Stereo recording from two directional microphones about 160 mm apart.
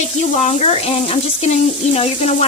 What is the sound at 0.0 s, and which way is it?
Frying, 45° left (ahead or behind).